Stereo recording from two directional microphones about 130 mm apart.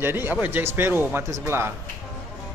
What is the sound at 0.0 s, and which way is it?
Speech, 15° right (ahead or behind).